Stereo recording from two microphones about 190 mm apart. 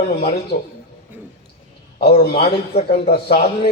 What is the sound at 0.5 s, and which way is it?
Speech, 60° left (ahead or behind).